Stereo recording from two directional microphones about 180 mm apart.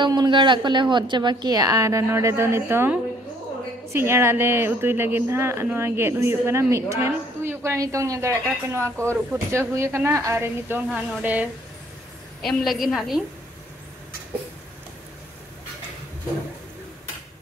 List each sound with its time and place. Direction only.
0.0 s a woman's voice: 25° right (ahead or behind); by 13.2 s centre (ahead or behind)